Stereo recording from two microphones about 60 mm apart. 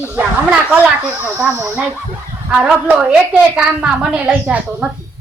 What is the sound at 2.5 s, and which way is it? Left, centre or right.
A woman's voice, right.